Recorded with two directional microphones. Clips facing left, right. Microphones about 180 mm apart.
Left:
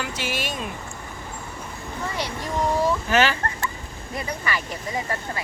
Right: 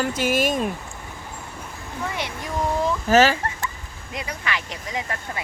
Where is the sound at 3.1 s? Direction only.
40° right (ahead or behind).